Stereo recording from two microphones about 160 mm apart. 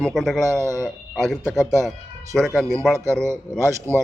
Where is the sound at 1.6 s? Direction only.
20° right (ahead or behind).